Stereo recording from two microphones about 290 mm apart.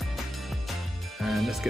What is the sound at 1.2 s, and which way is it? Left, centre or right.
Music, centre.